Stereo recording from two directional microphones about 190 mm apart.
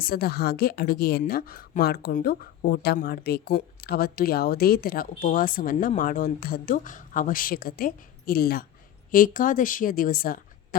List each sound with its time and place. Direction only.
0.0 s speech: 55° left (ahead or behind)